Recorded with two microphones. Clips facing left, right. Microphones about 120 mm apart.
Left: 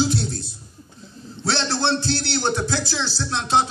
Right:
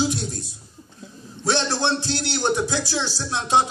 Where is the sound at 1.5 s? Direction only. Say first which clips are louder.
Even; 15° right (ahead or behind).